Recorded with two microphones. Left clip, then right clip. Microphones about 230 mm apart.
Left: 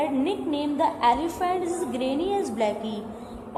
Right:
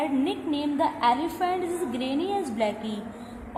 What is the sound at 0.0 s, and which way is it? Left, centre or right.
Music, right.